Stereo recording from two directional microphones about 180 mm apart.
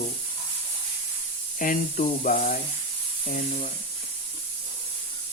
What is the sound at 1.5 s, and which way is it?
Speech, 50° left (ahead or behind).